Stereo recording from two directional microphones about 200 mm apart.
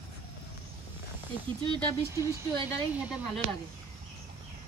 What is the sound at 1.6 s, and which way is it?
Speech, 20° right (ahead or behind).